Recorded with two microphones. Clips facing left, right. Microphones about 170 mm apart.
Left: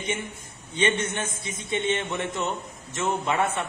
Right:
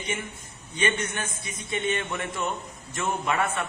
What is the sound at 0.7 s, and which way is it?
A man's voice, 25° left (ahead or behind).